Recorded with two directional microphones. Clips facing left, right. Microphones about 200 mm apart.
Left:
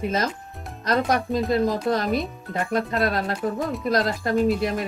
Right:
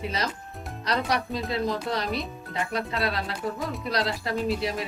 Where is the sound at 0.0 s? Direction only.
50° left (ahead or behind).